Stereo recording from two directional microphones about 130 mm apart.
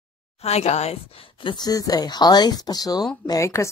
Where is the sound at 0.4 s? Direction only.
55° left (ahead or behind).